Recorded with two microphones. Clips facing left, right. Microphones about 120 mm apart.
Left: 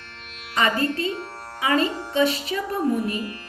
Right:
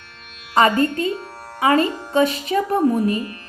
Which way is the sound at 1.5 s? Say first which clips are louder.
Right 5 dB; 45° right (ahead or behind).